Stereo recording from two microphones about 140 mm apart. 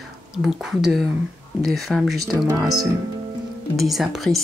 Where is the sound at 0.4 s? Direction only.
Centre (ahead or behind).